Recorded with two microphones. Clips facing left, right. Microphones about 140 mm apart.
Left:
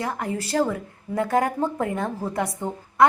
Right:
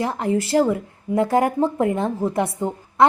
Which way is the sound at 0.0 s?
25° right (ahead or behind).